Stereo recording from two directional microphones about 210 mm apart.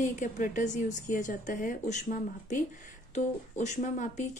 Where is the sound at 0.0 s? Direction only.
35° left (ahead or behind).